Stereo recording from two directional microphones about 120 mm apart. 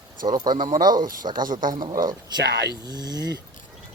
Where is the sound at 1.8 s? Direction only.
35° right (ahead or behind).